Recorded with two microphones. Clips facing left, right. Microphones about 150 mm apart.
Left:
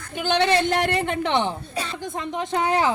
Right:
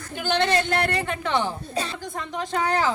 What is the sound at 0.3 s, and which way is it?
A man's voice, 15° left (ahead or behind).